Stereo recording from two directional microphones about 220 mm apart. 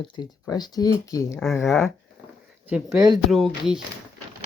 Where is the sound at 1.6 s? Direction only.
Centre (ahead or behind).